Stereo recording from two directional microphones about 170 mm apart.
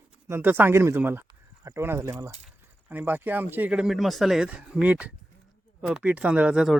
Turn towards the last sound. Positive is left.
turn(degrees=-5)  # may be behind; listen again after turning